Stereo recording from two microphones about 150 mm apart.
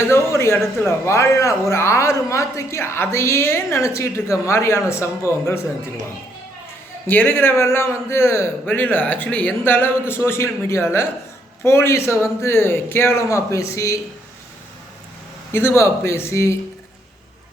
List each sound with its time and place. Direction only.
0.0 s a man's voice: 15° left (ahead or behind)
7.1 s a man's voice: 15° left (ahead or behind)
15.5 s a man's voice: 15° left (ahead or behind)